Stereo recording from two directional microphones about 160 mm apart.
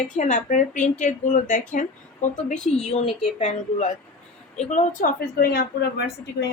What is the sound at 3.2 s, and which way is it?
A woman's voice, 45° left (ahead or behind).